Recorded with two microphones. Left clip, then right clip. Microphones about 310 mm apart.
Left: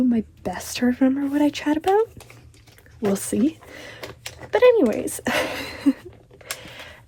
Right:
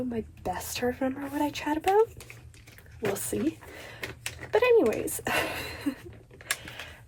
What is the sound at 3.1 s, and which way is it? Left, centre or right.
Speech, left.